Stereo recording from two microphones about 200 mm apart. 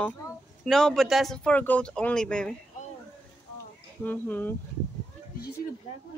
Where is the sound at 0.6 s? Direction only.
Centre (ahead or behind).